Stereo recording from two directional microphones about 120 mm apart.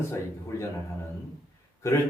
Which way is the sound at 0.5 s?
25° left (ahead or behind).